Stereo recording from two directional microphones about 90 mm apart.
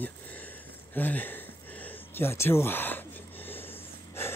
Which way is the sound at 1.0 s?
20° left (ahead or behind).